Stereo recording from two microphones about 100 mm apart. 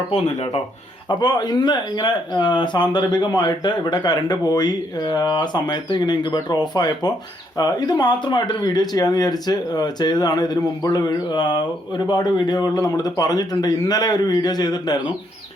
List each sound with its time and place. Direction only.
0.1 s speech: 90° left
1.0 s speech: 45° left (ahead or behind)